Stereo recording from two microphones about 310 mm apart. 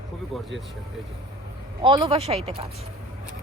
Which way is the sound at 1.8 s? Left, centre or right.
Centre.